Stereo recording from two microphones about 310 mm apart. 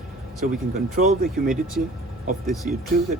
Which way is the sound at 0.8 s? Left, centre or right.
Right.